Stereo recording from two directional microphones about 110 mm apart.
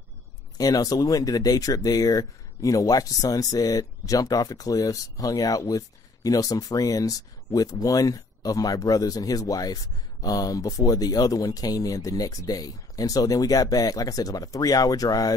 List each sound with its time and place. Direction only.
0.6 s speech: 35° left (ahead or behind)